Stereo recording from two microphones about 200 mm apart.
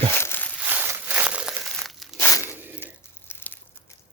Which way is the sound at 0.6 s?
10° right (ahead or behind).